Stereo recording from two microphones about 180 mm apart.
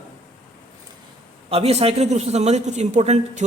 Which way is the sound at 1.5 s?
35° right (ahead or behind).